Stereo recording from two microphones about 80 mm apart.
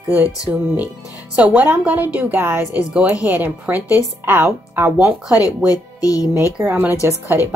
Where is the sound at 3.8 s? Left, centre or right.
Left.